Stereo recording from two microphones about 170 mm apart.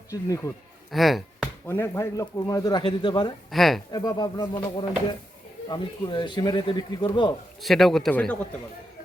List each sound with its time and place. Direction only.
0.1 s a man's voice: 20° left (ahead or behind)
0.9 s chop: centre (ahead or behind)
1.6 s speech: 15° left (ahead or behind)
3.5 s a man's voice: centre (ahead or behind)
3.9 s speech: 20° left (ahead or behind)
7.6 s a man's voice: centre (ahead or behind)